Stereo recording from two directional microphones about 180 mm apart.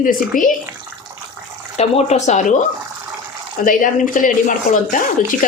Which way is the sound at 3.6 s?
50° left (ahead or behind).